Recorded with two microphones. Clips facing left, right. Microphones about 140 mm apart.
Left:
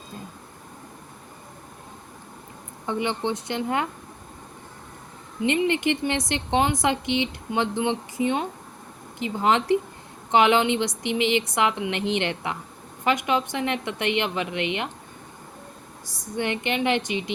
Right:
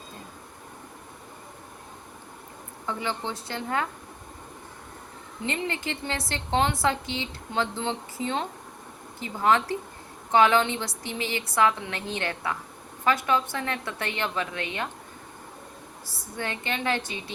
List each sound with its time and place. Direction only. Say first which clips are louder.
2.8 s a woman's voice: left 5 dB; 20° left (ahead or behind)
5.5 s a woman's voice: left 8 dB; 20° left (ahead or behind)
16.0 s speech: left 6 dB; 20° left (ahead or behind)